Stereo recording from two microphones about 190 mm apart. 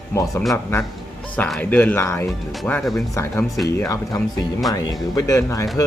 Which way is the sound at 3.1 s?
15° left (ahead or behind).